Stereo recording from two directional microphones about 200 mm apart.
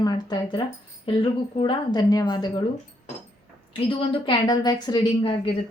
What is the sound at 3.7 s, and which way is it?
A woman's voice, 25° left (ahead or behind).